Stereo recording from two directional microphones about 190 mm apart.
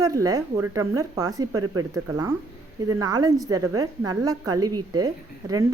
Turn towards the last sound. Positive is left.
turn(degrees=-20)  # may be behind; listen again after turning